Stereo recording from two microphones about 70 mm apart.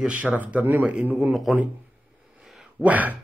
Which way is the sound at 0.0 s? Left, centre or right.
Centre.